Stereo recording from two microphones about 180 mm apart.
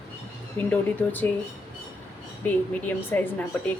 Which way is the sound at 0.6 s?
10° left (ahead or behind).